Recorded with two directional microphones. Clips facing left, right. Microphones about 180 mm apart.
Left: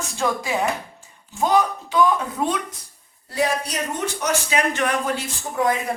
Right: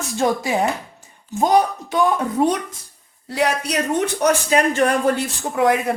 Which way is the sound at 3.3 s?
70° right (ahead or behind).